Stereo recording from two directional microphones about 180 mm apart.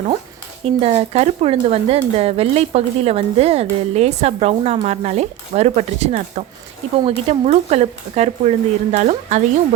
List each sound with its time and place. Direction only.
0.6 s speech: 35° right (ahead or behind)